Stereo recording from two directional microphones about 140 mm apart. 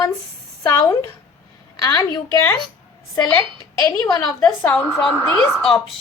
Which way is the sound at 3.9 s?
25° left (ahead or behind).